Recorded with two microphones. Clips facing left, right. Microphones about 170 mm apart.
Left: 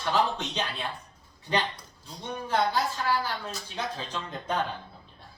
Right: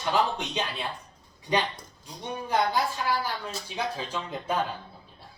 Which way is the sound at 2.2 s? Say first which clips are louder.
Right 1 dB; 15° right (ahead or behind).